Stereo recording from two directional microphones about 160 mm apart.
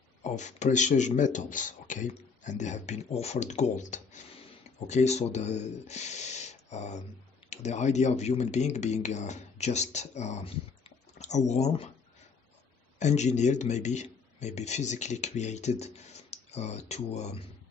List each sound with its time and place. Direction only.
0.2 s speech: 50° left (ahead or behind)
13.0 s speech: 45° left (ahead or behind)